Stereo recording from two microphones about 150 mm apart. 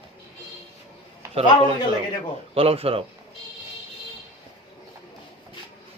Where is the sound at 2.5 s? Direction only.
40° right (ahead or behind).